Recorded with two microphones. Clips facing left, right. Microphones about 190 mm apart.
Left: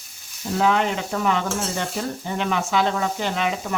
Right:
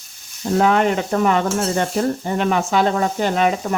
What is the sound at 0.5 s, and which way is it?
Stir, 50° right (ahead or behind).